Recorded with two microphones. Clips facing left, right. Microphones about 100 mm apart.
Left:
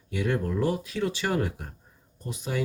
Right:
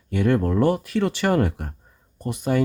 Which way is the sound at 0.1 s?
55° right (ahead or behind).